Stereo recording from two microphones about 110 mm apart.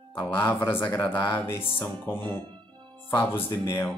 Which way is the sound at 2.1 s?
40° right (ahead or behind).